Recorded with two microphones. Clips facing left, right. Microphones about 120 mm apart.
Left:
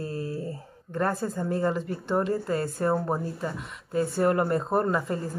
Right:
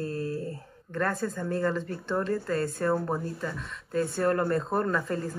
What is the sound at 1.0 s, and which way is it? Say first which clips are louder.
Speech: left 2 dB; 25° left (ahead or behind).